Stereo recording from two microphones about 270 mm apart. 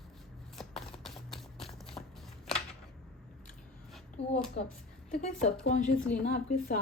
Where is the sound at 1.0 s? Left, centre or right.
Centre.